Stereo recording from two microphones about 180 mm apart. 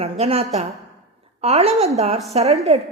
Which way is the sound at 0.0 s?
35° right (ahead or behind).